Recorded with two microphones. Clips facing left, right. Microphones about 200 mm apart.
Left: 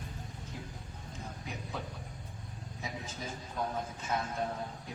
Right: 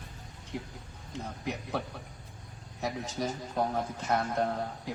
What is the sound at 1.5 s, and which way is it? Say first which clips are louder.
Speech: right 9 dB; 80° right.